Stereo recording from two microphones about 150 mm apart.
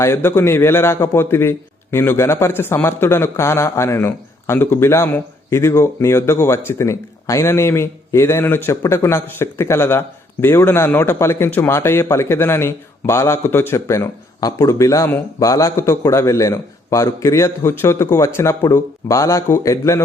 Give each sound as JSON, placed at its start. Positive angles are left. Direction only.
{"t": 0.0, "sound": "a man's voice", "side_deg": 15}